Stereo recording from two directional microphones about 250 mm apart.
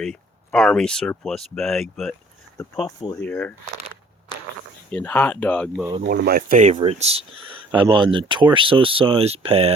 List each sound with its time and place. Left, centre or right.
0.0 s speech: centre
4.9 s speech: centre
6.0 s speech: right